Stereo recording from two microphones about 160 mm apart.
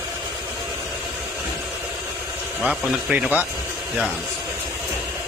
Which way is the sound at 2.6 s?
10° right (ahead or behind).